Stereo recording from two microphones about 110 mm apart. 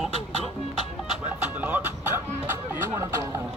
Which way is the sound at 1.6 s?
15° right (ahead or behind).